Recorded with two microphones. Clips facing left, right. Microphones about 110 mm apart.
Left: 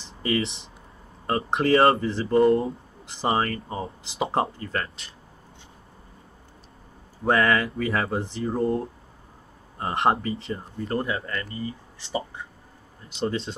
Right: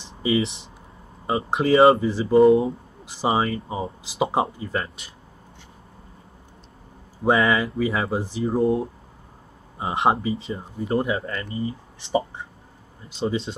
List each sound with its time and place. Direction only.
0.2 s speech: 5° right (ahead or behind)
7.2 s speech: 5° right (ahead or behind)
13.2 s speech: centre (ahead or behind)